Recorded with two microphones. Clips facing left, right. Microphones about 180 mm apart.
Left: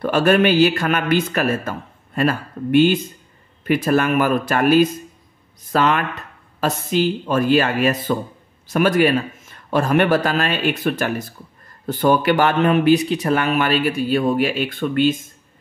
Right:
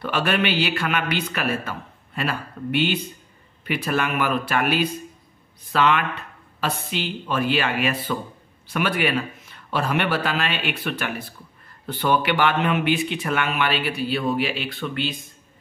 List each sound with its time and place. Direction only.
0.0 s speech: 45° left (ahead or behind)